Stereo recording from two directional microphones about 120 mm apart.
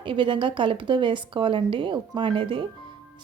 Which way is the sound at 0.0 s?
45° right (ahead or behind).